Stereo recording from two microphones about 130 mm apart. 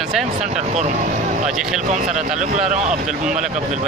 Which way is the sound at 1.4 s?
5° right (ahead or behind).